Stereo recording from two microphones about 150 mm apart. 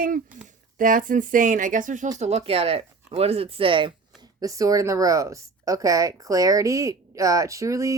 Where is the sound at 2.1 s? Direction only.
45° right (ahead or behind).